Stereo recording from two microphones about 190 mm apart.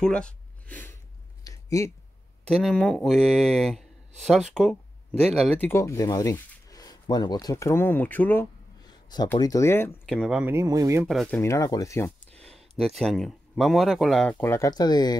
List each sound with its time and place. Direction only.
0.0 s speech: 5° left (ahead or behind)
1.4 s a sound: 15° left (ahead or behind)
2.6 s speech: 5° left (ahead or behind)
5.7 s speech: 15° left (ahead or behind)
8.8 s speech: 20° left (ahead or behind); by 10.4 s 5° left (ahead or behind)
10.4 s speech: 15° right (ahead or behind)
11.1 s speech: 5° left (ahead or behind)
12.4 s speech: centre (ahead or behind)
14.4 s speech: 15° left (ahead or behind)